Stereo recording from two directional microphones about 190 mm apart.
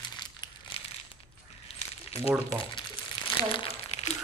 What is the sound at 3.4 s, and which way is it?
Crumpling, 30° left (ahead or behind).